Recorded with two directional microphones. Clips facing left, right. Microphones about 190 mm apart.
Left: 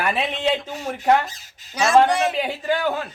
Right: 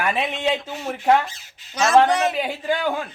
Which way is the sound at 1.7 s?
10° left (ahead or behind).